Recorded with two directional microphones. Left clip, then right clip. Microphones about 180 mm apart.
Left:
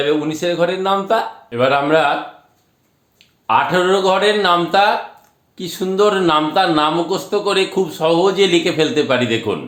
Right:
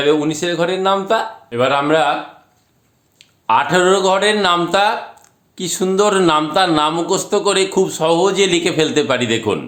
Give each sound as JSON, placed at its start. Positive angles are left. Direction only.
{"t": 0.0, "sound": "a man's voice", "side_deg": -25}
{"t": 3.2, "sound": "a man's voice", "side_deg": -20}